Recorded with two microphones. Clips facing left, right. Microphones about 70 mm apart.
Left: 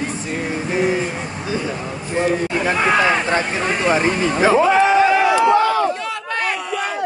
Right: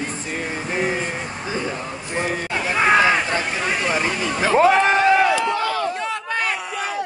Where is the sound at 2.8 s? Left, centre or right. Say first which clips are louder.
Right 2 dB; centre.